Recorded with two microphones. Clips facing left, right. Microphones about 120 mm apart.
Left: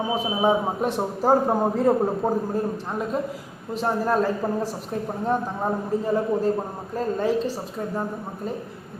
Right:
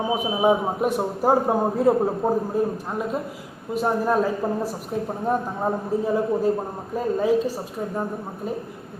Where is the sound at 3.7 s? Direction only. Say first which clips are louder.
Right 1 dB; 10° right (ahead or behind).